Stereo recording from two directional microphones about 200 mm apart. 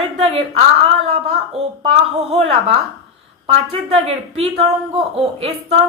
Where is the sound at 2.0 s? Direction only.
30° right (ahead or behind).